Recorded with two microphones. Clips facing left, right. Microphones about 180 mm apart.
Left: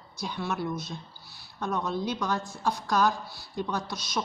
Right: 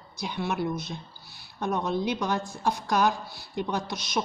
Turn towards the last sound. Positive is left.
turn(degrees=-20)  # may be behind; listen again after turning